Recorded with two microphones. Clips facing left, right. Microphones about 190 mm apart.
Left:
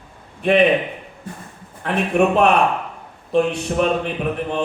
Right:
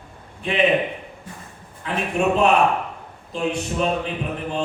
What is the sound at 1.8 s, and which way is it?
Speech, 65° left (ahead or behind).